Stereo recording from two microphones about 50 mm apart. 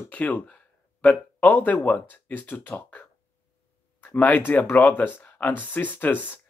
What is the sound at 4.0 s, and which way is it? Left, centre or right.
Speech, left.